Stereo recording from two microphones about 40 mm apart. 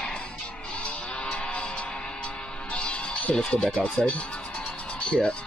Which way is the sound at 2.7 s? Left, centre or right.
Left.